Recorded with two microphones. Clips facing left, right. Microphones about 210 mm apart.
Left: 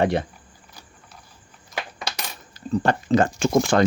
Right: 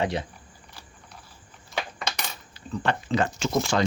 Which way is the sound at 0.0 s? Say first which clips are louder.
Left 6 dB; 55° left (ahead or behind).